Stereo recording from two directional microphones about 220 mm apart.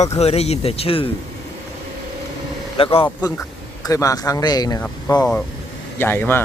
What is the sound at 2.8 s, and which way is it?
Speech, 25° left (ahead or behind).